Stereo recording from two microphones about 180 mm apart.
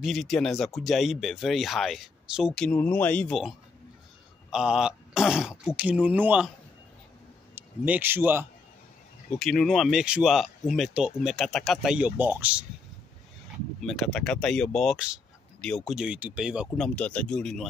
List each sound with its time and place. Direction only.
0.0 s speech: centre (ahead or behind)
7.5 s a man's voice: 10° right (ahead or behind)
9.3 s speech: 5° left (ahead or behind)
13.7 s speech: centre (ahead or behind)